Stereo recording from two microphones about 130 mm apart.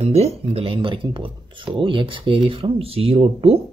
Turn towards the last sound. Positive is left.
turn(degrees=-50)  # may be behind; listen again after turning